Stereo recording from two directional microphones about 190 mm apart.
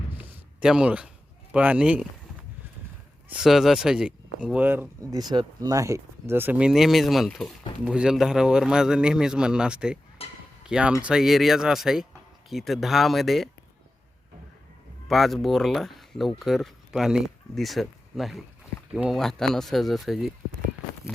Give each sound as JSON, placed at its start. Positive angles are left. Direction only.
{"t": 0.2, "sound": "a sound", "side_deg": -5}
{"t": 1.5, "sound": "speech", "side_deg": -5}
{"t": 3.2, "sound": "a man's voice", "side_deg": -5}
{"t": 5.2, "sound": "a man's voice", "side_deg": -20}
{"t": 10.2, "sound": "a sound", "side_deg": 30}
{"t": 10.7, "sound": "a man's voice", "side_deg": -5}
{"t": 15.0, "sound": "a man's voice", "side_deg": 0}